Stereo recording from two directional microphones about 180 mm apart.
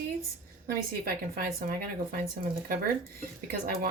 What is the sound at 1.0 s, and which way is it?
Speech, 55° right (ahead or behind).